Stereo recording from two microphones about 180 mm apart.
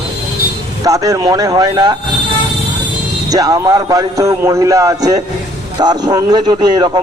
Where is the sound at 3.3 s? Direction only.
20° right (ahead or behind).